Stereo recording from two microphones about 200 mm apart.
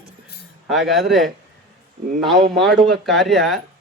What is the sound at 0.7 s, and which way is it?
Speech, centre (ahead or behind).